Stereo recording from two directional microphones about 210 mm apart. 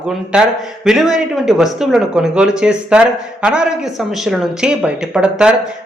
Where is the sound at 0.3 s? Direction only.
5° right (ahead or behind).